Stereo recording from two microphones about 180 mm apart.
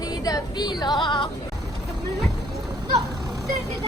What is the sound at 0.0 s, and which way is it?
Speech, 20° left (ahead or behind).